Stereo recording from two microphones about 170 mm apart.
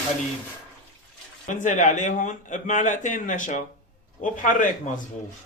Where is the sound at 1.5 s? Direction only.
45° left (ahead or behind).